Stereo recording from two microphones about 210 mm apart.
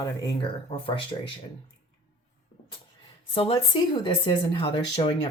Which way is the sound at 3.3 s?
25° left (ahead or behind).